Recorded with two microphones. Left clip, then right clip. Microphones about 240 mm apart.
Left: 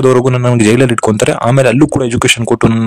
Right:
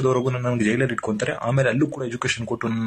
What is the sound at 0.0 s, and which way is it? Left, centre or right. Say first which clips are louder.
Speech: left 12 dB; left.